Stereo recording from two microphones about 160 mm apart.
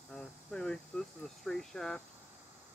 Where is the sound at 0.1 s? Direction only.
5° left (ahead or behind).